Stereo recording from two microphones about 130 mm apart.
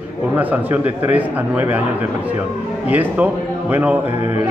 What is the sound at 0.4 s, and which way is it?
A man's voice, 15° right (ahead or behind).